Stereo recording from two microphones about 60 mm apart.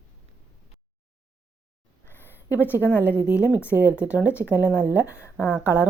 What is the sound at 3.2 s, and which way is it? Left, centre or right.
Speech, right.